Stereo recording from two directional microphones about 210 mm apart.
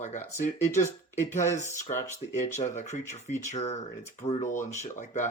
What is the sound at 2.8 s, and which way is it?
Speech, 35° left (ahead or behind).